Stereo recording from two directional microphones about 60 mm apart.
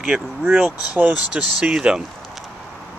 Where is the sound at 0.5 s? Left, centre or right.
Right.